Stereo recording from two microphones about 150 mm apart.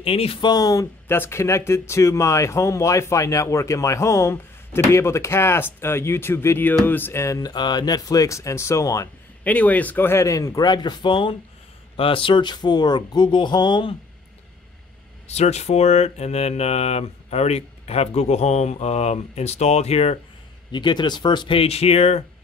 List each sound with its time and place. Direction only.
0.0 s speech: 40° left (ahead or behind); by 9.1 s 20° left (ahead or behind)
9.4 s speech: 10° left (ahead or behind); by 13.9 s 30° left (ahead or behind)
15.2 s speech: 45° left (ahead or behind)
20.7 s speech: 30° left (ahead or behind)